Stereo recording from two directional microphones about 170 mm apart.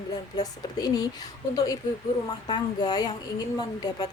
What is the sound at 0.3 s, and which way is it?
A woman's voice, 25° left (ahead or behind).